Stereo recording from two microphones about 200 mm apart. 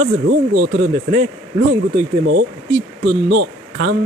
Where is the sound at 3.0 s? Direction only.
60° right (ahead or behind).